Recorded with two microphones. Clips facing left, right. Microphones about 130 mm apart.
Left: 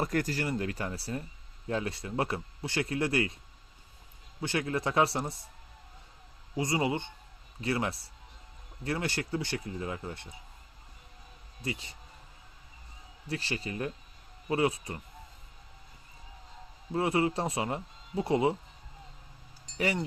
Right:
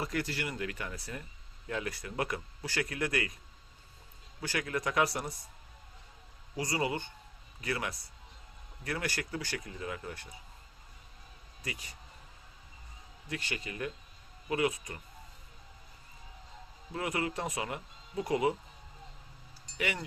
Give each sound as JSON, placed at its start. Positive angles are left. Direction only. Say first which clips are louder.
{"t": 0.0, "sound": "speech", "louder": "left 5 dB", "side_deg": 45}
{"t": 4.4, "sound": "speech", "louder": "left 3 dB", "side_deg": 25}
{"t": 6.6, "sound": "speech", "louder": "left 3 dB", "side_deg": 25}
{"t": 11.6, "sound": "speech", "louder": "left 6 dB", "side_deg": 25}
{"t": 13.2, "sound": "speech", "louder": "left 4 dB", "side_deg": 30}
{"t": 16.9, "sound": "speech", "louder": "left 6 dB", "side_deg": 30}
{"t": 19.7, "sound": "speech", "louder": "left 5 dB", "side_deg": 35}